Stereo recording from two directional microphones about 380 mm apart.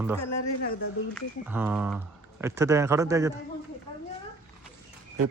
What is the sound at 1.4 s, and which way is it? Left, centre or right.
Speech, centre.